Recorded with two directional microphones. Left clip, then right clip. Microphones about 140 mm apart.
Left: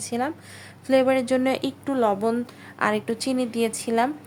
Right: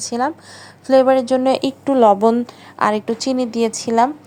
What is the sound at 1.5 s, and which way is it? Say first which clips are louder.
A woman's voice: right 9 dB; 35° right (ahead or behind).